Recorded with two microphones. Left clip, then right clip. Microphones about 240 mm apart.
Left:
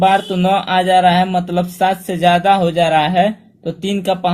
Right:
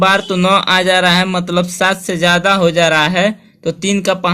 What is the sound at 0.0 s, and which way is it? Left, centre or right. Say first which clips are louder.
A man's voice: right 1 dB; right.